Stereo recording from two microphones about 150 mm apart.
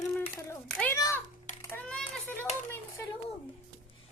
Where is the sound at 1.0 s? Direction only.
20° left (ahead or behind).